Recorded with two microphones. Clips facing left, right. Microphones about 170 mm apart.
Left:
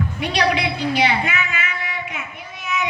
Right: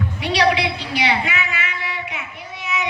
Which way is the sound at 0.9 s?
50° left (ahead or behind).